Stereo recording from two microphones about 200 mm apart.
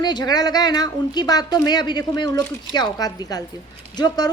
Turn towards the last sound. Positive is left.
turn(degrees=20)  # may be behind; listen again after turning